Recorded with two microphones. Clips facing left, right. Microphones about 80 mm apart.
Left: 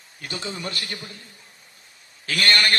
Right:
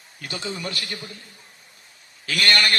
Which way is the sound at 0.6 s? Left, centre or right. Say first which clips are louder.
Even; left.